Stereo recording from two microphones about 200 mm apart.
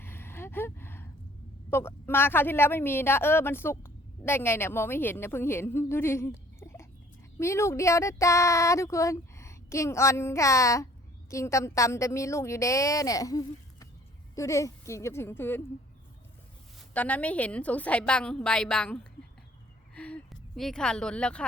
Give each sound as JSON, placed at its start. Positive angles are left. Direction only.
{"t": 0.0, "sound": "a sound", "side_deg": 10}
{"t": 1.7, "sound": "speech", "side_deg": 10}
{"t": 16.9, "sound": "speech", "side_deg": 5}
{"t": 20.0, "sound": "a woman's voice", "side_deg": 5}